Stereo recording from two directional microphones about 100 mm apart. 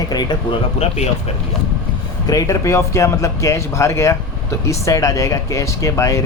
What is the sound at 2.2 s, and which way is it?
Speech, 35° left (ahead or behind).